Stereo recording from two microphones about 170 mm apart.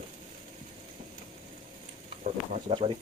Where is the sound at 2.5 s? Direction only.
35° right (ahead or behind).